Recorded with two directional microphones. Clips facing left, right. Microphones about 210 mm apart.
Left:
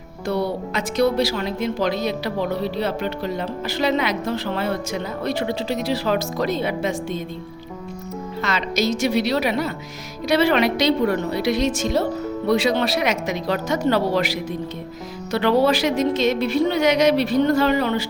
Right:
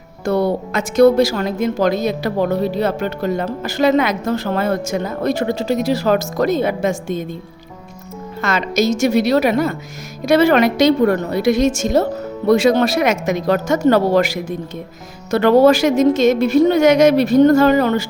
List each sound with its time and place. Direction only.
0.3 s a woman's voice: 50° right (ahead or behind)
8.4 s a woman's voice: 45° right (ahead or behind)